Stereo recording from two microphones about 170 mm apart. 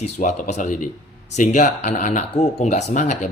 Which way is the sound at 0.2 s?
45° left (ahead or behind).